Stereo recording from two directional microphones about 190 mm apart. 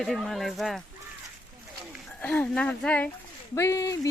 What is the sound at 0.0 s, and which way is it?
Speech, centre (ahead or behind).